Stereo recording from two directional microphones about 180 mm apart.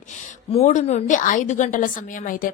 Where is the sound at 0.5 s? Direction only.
40° left (ahead or behind).